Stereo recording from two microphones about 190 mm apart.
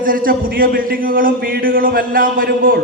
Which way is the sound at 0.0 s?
50° right (ahead or behind).